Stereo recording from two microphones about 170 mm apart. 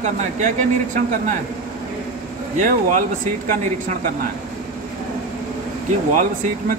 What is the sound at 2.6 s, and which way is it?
Speech, 50° right (ahead or behind).